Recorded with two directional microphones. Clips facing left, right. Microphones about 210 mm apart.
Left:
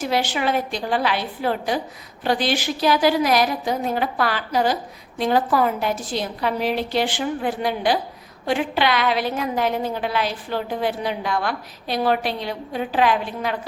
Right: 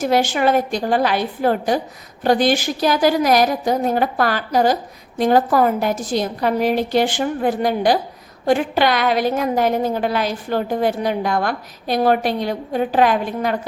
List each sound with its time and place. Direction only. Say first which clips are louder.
0.0 s a woman's voice: right 5 dB; 45° right (ahead or behind)